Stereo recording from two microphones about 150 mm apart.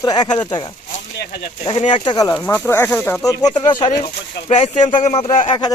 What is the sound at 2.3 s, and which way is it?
Speech, 15° left (ahead or behind).